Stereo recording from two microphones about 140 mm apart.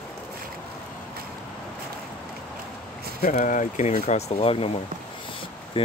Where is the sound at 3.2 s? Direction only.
65° left (ahead or behind); by 4.7 s 45° left (ahead or behind).